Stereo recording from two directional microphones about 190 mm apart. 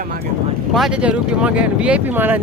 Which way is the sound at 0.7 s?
5° right (ahead or behind).